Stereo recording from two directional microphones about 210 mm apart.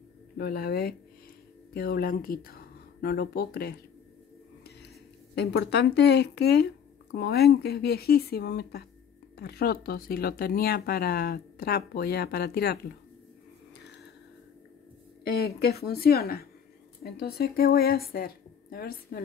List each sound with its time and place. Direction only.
0.4 s speech: 50° left (ahead or behind)
5.3 s speech: 55° left (ahead or behind)
15.4 s a woman's voice: 50° left (ahead or behind)